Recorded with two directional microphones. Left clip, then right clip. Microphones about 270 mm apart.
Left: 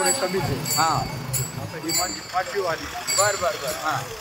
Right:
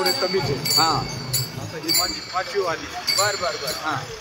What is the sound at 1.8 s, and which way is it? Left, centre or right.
Speech, right.